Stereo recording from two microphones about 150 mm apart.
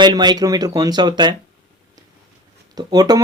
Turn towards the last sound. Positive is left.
turn(degrees=-25)  # may be behind; listen again after turning